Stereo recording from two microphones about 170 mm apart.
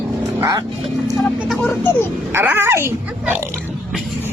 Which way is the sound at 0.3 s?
20° right (ahead or behind).